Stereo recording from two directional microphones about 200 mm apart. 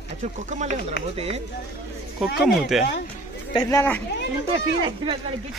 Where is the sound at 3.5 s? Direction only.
15° left (ahead or behind).